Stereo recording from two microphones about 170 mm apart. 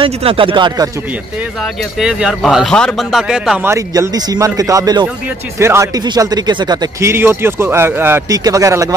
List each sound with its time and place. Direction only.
0.0 s speech: 30° right (ahead or behind)
1.6 s speech: 5° right (ahead or behind); by 8.9 s 20° right (ahead or behind)